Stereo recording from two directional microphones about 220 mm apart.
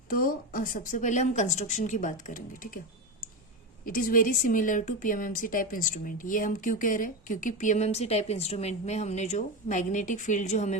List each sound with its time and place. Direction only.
0.1 s speech: 40° left (ahead or behind)
3.8 s speech: 40° left (ahead or behind)